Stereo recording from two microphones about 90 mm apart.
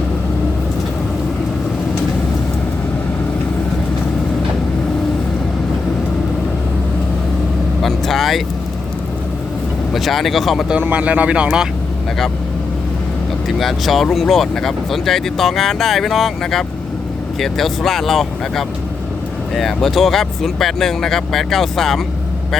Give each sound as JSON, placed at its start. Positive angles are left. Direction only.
{"t": 7.8, "sound": "vehicle", "side_deg": 0}
{"t": 9.9, "sound": "speech", "side_deg": 0}
{"t": 10.8, "sound": "speech", "side_deg": -15}
{"t": 13.6, "sound": "speech", "side_deg": 0}